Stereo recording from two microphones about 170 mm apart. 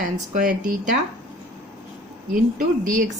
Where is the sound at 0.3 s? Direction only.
55° right (ahead or behind).